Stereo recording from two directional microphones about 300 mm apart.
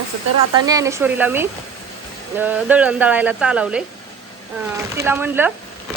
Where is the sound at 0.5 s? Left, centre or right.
Centre.